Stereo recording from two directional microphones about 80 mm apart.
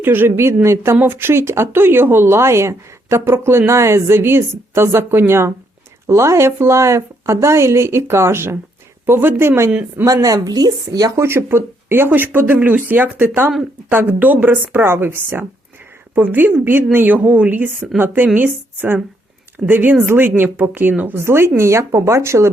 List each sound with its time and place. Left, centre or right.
0.0 s speech: right
10.1 s a woman's voice: right
11.2 s a woman's voice: right